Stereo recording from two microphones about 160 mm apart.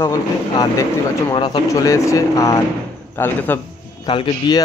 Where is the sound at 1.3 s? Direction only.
30° left (ahead or behind).